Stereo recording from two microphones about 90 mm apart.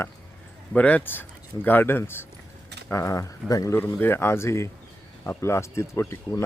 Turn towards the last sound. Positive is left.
turn(degrees=30)  # may be behind; listen again after turning